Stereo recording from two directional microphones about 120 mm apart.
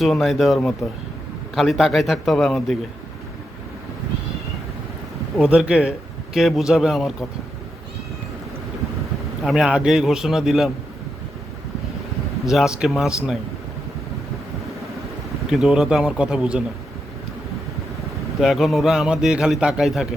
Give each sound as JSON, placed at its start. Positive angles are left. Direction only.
{"t": 0.0, "sound": "a man's voice", "side_deg": 0}
{"t": 5.4, "sound": "a man's voice", "side_deg": -5}
{"t": 9.4, "sound": "a man's voice", "side_deg": 0}
{"t": 12.5, "sound": "a man's voice", "side_deg": -5}
{"t": 15.4, "sound": "speech", "side_deg": -5}
{"t": 18.3, "sound": "a man's voice", "side_deg": 0}